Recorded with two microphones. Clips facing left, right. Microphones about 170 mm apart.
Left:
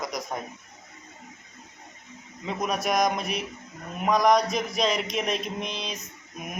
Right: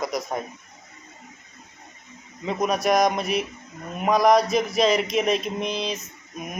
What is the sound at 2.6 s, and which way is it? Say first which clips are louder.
A man's voice: right 4 dB; centre (ahead or behind).